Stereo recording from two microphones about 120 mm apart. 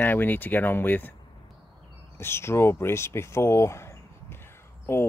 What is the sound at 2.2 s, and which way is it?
Speech, 20° left (ahead or behind).